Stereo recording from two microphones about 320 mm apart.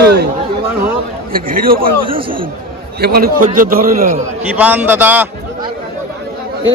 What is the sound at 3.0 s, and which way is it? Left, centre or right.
Speech, right.